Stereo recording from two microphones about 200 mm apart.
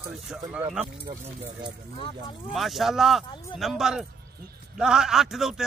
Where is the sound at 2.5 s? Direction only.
Centre (ahead or behind).